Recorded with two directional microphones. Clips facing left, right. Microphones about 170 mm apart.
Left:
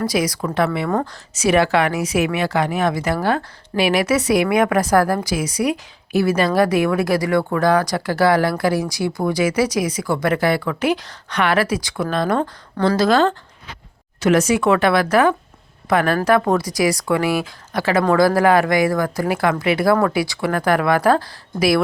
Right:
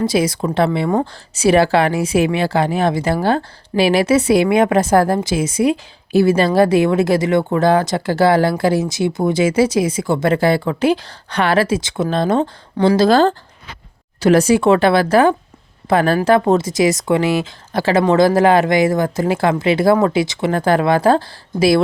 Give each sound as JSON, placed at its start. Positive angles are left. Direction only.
{"t": 0.0, "sound": "a woman's voice", "side_deg": -25}